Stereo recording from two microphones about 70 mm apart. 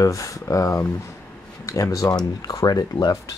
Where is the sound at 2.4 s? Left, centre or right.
Left.